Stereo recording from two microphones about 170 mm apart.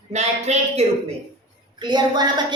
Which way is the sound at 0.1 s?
40° right (ahead or behind).